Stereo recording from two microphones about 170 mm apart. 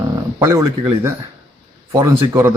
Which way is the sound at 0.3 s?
15° right (ahead or behind).